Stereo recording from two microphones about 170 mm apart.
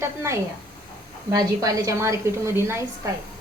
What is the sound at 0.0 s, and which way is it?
A woman's voice, 15° right (ahead or behind).